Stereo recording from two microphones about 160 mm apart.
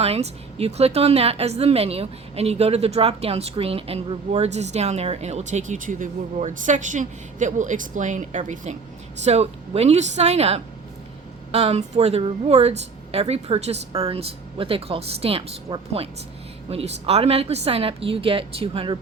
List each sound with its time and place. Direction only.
0.0 s a woman's voice: 40° right (ahead or behind)